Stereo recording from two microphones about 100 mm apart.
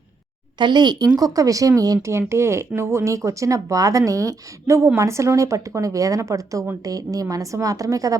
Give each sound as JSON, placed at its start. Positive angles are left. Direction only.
{"t": 0.6, "sound": "speech", "side_deg": -50}